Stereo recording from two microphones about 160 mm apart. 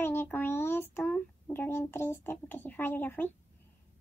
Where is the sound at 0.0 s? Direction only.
15° left (ahead or behind).